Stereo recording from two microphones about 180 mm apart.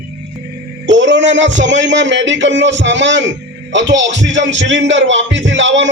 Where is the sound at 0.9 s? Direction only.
85° right.